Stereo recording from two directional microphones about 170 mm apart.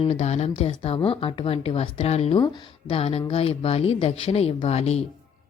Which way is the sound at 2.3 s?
25° left (ahead or behind).